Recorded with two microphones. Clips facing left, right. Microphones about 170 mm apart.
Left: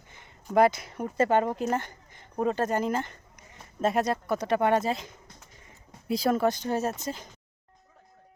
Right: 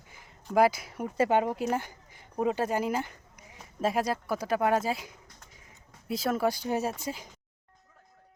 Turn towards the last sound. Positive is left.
turn(degrees=-10)  # may be behind; listen again after turning